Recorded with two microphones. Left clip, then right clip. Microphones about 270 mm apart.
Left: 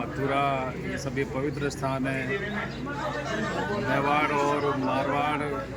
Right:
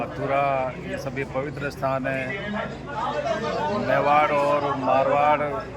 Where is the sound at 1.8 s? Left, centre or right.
Centre.